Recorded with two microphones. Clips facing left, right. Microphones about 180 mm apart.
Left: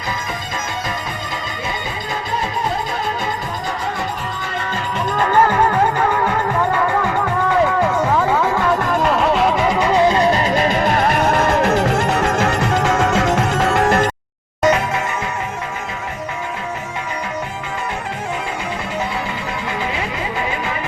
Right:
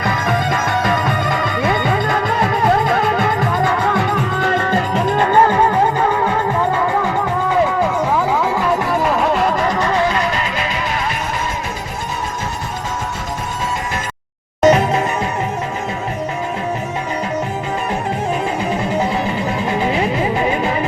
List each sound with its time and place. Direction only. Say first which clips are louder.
0.0 s music: right 8 dB; 65° right (ahead or behind); by 4.8 s 50° right (ahead or behind)
4.9 s music: right 2 dB; 30° right (ahead or behind)
5.3 s music: even; 15° right (ahead or behind)
8.4 s music: even; 10° right (ahead or behind); by 10.1 s 15° left (ahead or behind)
10.1 s music: left 4 dB; 30° left (ahead or behind); by 14.1 s 65° left (ahead or behind)
14.6 s music: right 4 dB; 25° right (ahead or behind)
19.8 s music: right 6 dB; 25° right (ahead or behind)